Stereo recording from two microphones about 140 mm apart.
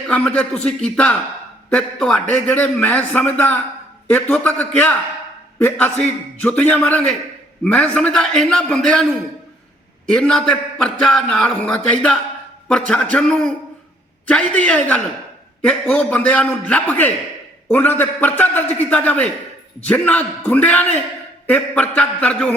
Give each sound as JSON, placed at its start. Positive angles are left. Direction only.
{"t": 0.1, "sound": "a man's voice", "side_deg": 10}
{"t": 10.1, "sound": "a man's voice", "side_deg": 5}